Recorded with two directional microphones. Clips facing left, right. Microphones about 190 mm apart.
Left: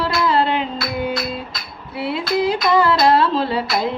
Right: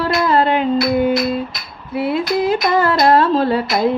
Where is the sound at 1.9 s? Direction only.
45° right (ahead or behind).